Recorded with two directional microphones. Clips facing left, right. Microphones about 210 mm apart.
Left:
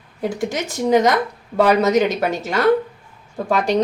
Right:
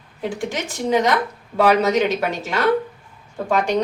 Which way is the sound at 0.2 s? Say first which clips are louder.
Left 3 dB; 40° left (ahead or behind).